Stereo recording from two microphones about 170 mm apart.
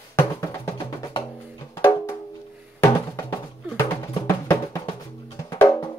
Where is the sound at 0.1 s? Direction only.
15° left (ahead or behind).